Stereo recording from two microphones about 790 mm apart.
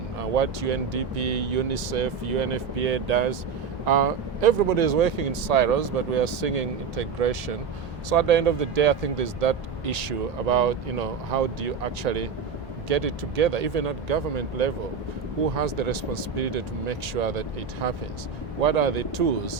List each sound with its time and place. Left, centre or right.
0.2 s speech: right